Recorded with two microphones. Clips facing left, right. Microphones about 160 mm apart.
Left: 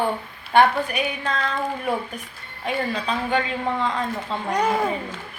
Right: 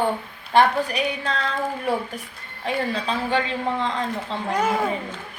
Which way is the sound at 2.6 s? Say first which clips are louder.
Even; 30° right (ahead or behind).